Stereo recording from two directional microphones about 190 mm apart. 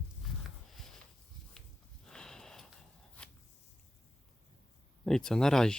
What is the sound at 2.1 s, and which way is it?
Sniff, 5° left (ahead or behind).